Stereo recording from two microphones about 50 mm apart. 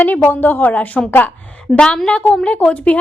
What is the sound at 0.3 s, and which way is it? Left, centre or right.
Speech, left.